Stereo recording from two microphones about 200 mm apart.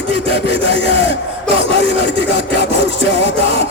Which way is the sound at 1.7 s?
65° left (ahead or behind).